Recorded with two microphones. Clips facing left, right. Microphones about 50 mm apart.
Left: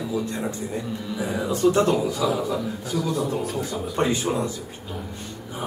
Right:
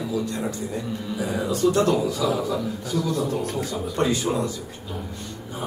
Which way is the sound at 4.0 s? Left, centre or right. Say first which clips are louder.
Even; left.